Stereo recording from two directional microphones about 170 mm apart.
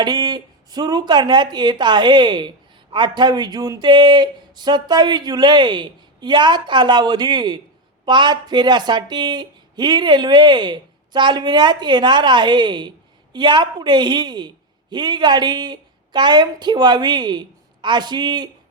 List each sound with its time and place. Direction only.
0.0 s speech: 25° right (ahead or behind)